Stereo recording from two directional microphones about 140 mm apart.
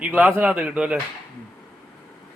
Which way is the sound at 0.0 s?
10° right (ahead or behind).